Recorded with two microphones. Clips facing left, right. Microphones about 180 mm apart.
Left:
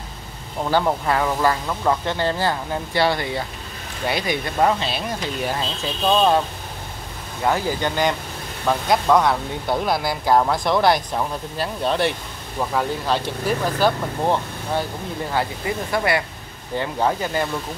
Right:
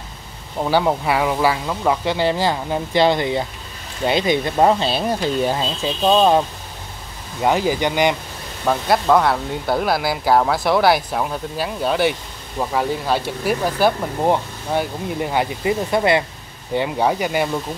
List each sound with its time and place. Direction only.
0.6 s speech: 10° right (ahead or behind); by 5.7 s 30° right (ahead or behind)
7.4 s speech: 15° right (ahead or behind)
8.6 s speech: centre (ahead or behind)